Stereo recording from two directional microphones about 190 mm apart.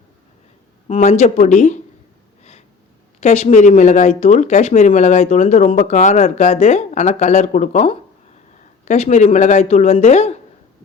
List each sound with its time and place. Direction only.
0.9 s speech: 35° left (ahead or behind)
2.4 s a sound: 35° left (ahead or behind)
3.2 s speech: 35° left (ahead or behind)